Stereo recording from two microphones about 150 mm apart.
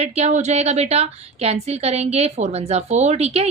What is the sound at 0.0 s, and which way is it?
A woman's voice, 45° right (ahead or behind).